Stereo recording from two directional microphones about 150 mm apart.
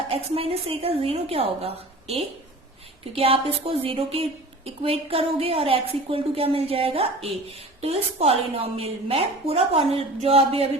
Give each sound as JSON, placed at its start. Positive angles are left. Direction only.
{"t": 0.1, "sound": "a woman's voice", "side_deg": -40}